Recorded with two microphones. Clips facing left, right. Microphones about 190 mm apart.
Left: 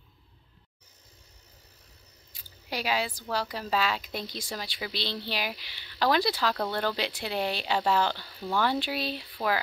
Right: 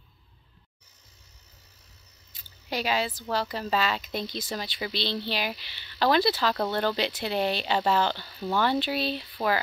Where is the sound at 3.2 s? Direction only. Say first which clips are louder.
Right 2 dB; 10° left (ahead or behind).